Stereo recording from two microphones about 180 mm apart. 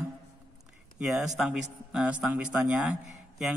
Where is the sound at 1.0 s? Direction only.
5° right (ahead or behind).